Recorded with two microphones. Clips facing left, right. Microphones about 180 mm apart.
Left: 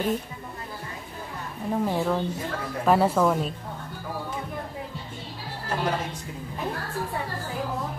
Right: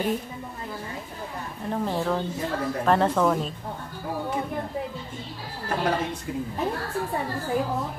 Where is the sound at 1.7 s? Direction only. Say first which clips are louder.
Left 1 dB; 5° left (ahead or behind).